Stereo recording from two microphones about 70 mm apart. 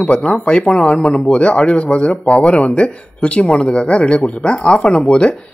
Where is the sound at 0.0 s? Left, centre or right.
Centre.